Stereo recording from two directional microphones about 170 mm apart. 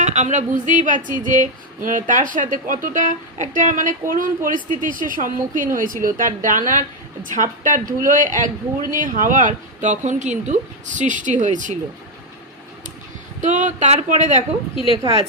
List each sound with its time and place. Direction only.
0.0 s speech: 45° right (ahead or behind)
13.4 s speech: 45° right (ahead or behind)